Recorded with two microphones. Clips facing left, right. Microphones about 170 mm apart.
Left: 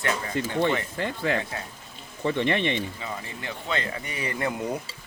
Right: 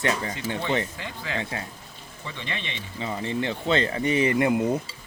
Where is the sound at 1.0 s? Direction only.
55° left (ahead or behind).